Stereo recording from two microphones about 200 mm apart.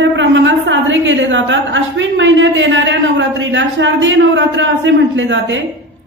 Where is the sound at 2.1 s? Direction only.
70° right (ahead or behind).